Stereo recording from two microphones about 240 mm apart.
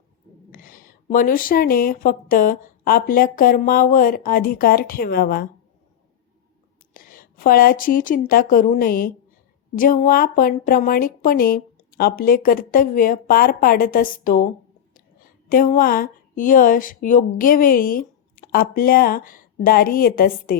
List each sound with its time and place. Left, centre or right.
0.5 s speech: left
6.9 s speech: left
15.4 s speech: left